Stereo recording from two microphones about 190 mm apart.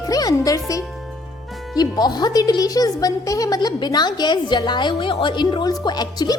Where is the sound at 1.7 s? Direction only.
20° left (ahead or behind).